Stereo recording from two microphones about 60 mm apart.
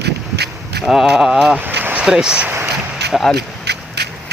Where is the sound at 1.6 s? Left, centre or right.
Right.